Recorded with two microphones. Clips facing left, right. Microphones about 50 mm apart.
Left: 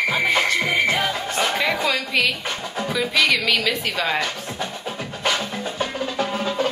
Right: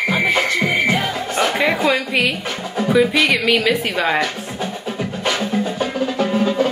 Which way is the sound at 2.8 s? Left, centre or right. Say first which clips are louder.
Right 6 dB; right.